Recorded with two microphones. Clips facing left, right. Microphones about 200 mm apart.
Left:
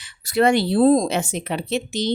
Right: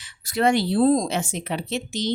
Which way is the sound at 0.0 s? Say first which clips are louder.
Left 3 dB; 65° left (ahead or behind).